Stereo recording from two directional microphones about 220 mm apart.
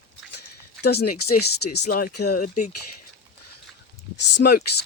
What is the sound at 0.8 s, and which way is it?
Speech, 45° left (ahead or behind).